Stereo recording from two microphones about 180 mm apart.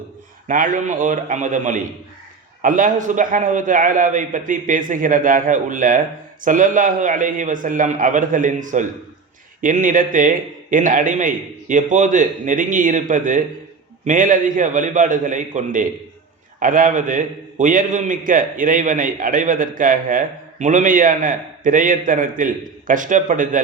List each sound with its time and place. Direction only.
0.4 s a man's voice: 45° right (ahead or behind)